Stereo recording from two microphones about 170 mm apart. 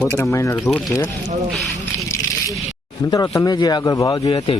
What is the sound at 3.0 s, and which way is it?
Speech, 20° left (ahead or behind).